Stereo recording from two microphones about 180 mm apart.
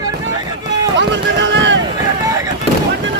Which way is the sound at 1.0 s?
85° right.